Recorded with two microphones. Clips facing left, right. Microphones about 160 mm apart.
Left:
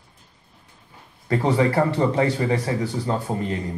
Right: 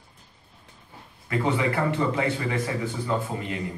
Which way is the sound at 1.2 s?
35° left (ahead or behind).